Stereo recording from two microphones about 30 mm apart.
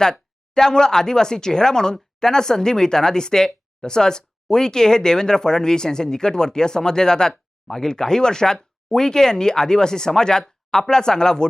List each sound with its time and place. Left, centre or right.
0.0 s speech: left